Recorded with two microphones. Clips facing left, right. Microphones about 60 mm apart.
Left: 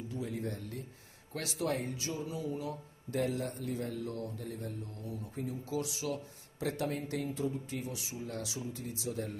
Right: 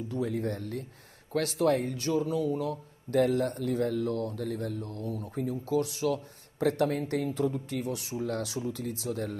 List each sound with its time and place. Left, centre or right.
0.1 s speech: right